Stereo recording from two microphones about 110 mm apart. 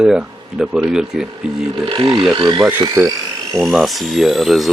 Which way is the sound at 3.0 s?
30° right (ahead or behind).